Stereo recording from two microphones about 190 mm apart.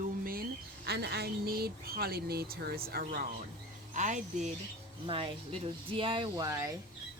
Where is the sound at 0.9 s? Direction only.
60° right (ahead or behind); by 4.5 s 40° right (ahead or behind).